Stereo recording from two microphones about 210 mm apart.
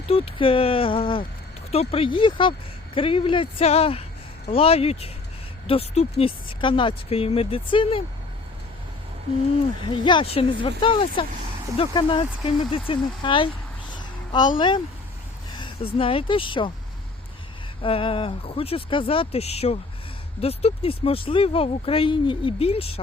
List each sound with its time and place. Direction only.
0.1 s speech: 25° left (ahead or behind)
9.9 s speech: 25° left (ahead or behind)
13.9 s a sound: 20° left (ahead or behind)
15.5 s speech: 25° left (ahead or behind)
17.8 s speech: 25° left (ahead or behind)